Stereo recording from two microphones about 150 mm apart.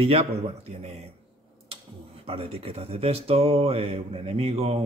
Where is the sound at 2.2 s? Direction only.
40° right (ahead or behind).